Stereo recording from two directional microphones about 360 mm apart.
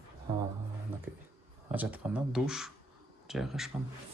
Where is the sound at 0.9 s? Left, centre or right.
Centre.